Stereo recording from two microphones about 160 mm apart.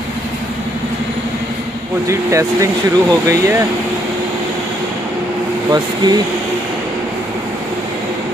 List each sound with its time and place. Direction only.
2.0 s speech: 20° right (ahead or behind)
5.7 s speech: 25° right (ahead or behind)